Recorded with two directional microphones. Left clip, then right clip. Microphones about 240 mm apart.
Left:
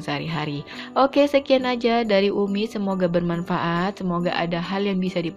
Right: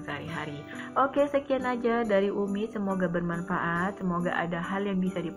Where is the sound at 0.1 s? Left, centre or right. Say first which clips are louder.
Left 9 dB; left.